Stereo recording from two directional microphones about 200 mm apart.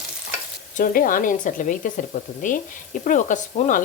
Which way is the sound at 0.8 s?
45° left (ahead or behind).